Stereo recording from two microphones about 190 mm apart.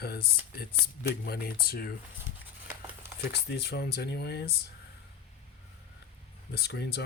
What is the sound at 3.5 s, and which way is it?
Speech, 60° left (ahead or behind).